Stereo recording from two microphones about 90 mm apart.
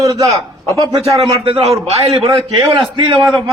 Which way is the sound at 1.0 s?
90° right.